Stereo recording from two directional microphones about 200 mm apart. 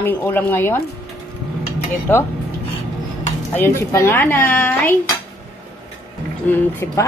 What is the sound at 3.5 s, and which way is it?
A woman's voice, 15° left (ahead or behind).